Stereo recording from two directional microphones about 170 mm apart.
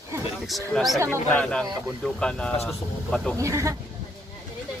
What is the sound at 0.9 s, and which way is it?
Speech, 15° right (ahead or behind).